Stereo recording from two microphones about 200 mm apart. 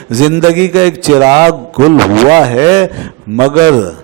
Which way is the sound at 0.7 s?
20° right (ahead or behind).